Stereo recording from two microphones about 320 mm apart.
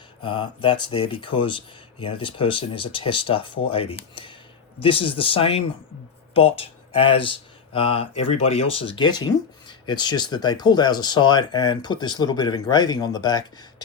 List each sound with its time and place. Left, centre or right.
0.2 s speech: centre